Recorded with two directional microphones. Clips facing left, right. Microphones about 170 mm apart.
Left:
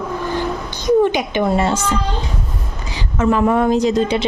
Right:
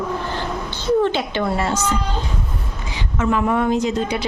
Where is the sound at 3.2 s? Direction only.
35° left (ahead or behind).